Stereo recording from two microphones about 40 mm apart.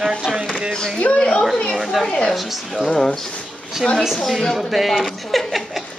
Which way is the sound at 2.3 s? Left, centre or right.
Centre.